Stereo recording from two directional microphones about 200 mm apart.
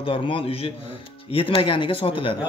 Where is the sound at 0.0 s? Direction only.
25° left (ahead or behind).